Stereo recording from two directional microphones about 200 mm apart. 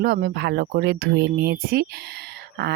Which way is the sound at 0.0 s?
50° right (ahead or behind).